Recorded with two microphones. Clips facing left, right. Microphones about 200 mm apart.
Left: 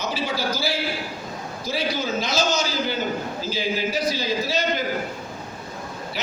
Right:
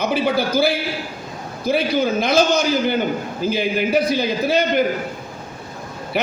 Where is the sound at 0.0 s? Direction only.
60° right (ahead or behind).